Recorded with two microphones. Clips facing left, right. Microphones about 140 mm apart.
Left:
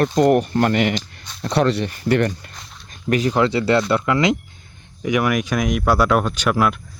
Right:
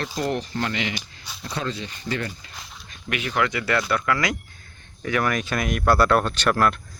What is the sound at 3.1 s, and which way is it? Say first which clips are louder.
Speech: left 7 dB; 35° left (ahead or behind).